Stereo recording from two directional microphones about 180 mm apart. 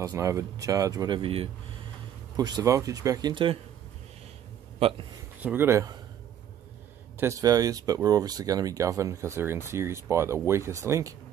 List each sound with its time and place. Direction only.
0.0 s speech: 15° right (ahead or behind)
4.7 s speech: 30° right (ahead or behind)
5.4 s speech: 10° right (ahead or behind)
7.2 s speech: 15° right (ahead or behind)